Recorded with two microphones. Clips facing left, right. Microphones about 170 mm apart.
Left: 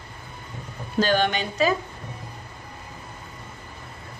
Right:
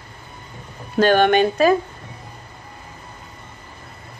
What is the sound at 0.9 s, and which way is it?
Speech, 55° right (ahead or behind).